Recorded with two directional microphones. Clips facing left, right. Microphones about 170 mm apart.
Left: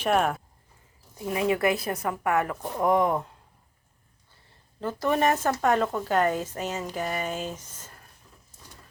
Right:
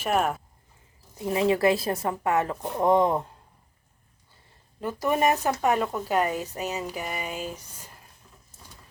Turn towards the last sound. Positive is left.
turn(degrees=-5)  # may be behind; listen again after turning